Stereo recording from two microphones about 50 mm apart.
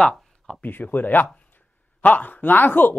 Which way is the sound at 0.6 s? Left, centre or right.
Left.